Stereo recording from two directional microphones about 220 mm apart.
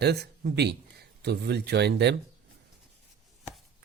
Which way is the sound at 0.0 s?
50° right (ahead or behind).